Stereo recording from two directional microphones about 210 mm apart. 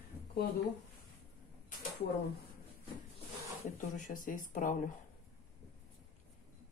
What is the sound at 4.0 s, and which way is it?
Speech, 40° left (ahead or behind).